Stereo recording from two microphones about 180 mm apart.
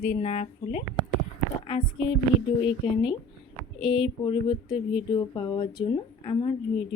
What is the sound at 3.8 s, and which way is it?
Speech, 25° left (ahead or behind).